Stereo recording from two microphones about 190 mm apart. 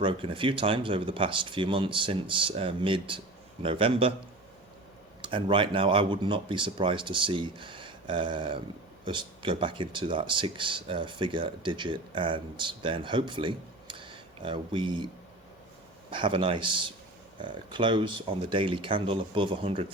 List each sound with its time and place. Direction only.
0.0 s speech: 25° right (ahead or behind)
5.2 s speech: 25° right (ahead or behind)